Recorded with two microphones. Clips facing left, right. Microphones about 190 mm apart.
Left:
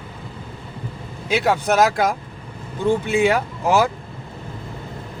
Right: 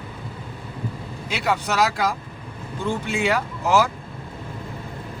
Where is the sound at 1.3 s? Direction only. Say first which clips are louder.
Left 5 dB; 55° left (ahead or behind).